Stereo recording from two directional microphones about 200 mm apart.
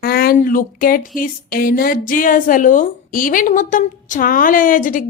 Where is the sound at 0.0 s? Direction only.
50° left (ahead or behind).